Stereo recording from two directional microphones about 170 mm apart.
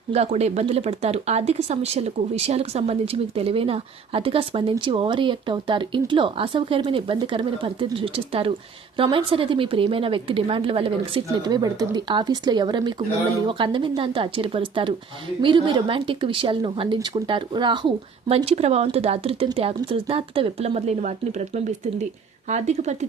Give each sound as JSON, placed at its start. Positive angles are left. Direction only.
{"t": 0.1, "sound": "speech", "side_deg": -40}